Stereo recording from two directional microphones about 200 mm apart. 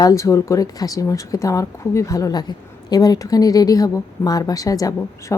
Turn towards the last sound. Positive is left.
turn(degrees=15)  # may be behind; listen again after turning